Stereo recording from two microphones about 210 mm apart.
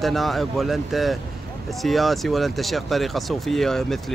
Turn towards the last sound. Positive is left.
turn(degrees=0)  # may be behind; listen again after turning